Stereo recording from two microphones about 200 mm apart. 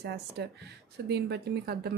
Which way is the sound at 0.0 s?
55° right (ahead or behind).